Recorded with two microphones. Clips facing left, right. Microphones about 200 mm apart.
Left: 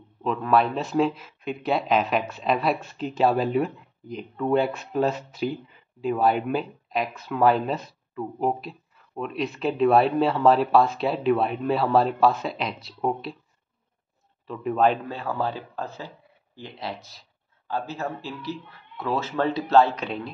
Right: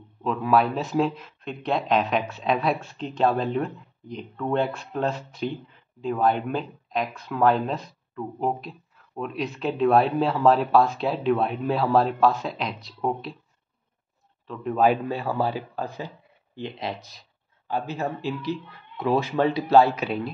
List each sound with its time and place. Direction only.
0.2 s speech: centre (ahead or behind)
14.5 s speech: 5° left (ahead or behind)
14.8 s speech: 10° right (ahead or behind)